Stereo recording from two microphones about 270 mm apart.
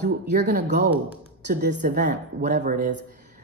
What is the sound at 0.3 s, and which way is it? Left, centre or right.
Speech, right.